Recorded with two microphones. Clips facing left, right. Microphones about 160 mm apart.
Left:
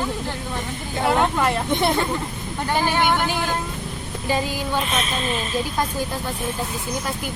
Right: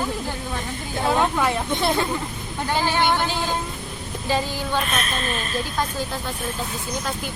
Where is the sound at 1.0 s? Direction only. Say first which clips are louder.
Left 1 dB; centre (ahead or behind).